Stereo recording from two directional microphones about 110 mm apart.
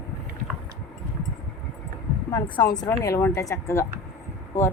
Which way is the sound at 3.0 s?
25° left (ahead or behind).